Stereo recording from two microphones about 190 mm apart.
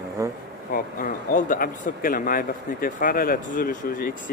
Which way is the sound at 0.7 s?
45° left (ahead or behind).